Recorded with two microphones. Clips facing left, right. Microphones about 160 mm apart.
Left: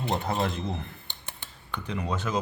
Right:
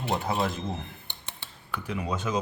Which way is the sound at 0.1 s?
Centre (ahead or behind).